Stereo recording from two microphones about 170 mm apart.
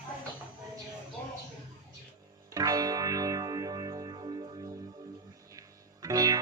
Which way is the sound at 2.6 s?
20° right (ahead or behind).